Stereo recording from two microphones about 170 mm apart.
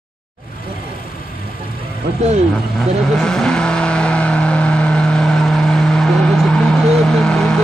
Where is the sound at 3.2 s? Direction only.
5° left (ahead or behind).